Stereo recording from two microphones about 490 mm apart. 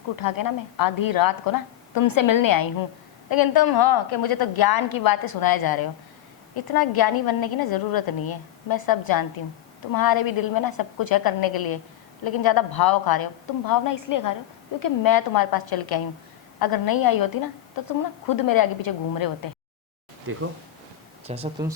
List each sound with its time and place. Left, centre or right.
0.2 s a woman's voice: left
20.3 s speech: right
21.2 s speech: centre